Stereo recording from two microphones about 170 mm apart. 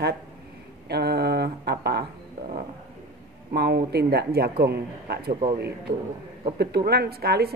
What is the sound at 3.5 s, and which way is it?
A woman's voice, 65° right (ahead or behind).